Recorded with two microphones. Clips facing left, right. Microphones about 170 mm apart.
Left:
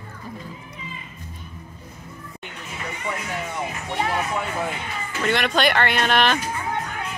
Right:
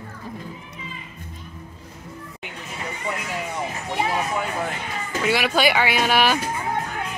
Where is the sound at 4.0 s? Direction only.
10° right (ahead or behind).